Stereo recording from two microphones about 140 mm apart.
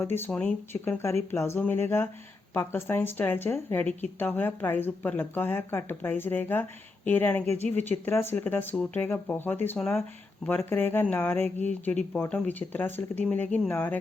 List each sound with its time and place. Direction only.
0.0 s speech: 15° left (ahead or behind)